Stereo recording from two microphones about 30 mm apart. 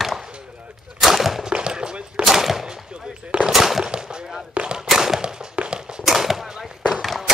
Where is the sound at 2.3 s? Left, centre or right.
Centre.